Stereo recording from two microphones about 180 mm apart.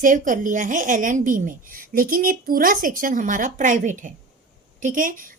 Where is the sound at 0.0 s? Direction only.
45° right (ahead or behind).